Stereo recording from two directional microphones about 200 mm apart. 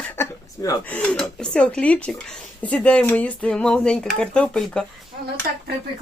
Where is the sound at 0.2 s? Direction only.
15° left (ahead or behind).